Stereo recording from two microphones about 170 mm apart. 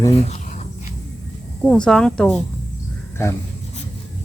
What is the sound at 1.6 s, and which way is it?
Speech, 5° left (ahead or behind).